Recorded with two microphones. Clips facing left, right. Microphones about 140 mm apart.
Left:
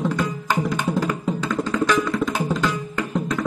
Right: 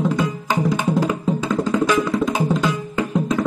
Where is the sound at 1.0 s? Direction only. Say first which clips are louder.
Right 3 dB; 15° right (ahead or behind).